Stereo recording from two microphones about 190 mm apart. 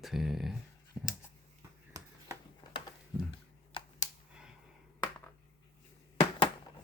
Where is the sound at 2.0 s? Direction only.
20° right (ahead or behind).